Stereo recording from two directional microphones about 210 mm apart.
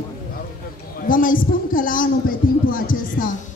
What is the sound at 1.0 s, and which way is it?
A man's voice, 40° left (ahead or behind).